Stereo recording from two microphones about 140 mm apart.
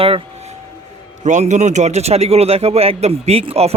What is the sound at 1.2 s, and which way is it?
Speech, 60° right (ahead or behind).